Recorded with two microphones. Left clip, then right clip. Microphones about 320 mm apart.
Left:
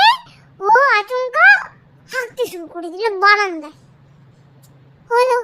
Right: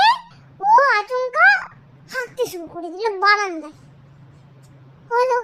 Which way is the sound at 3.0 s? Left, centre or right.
Right.